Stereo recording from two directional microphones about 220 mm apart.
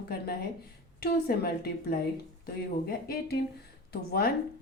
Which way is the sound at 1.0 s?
45° left (ahead or behind).